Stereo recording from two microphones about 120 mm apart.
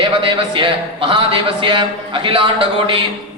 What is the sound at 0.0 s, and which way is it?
Speech, 45° right (ahead or behind).